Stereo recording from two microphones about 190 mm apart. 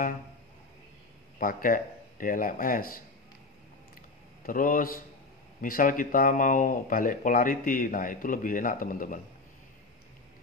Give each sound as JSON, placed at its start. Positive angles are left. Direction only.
{"t": 1.4, "sound": "speech", "side_deg": 45}
{"t": 4.4, "sound": "speech", "side_deg": 45}